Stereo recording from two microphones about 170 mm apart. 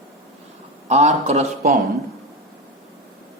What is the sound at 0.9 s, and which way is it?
Speech, 40° right (ahead or behind).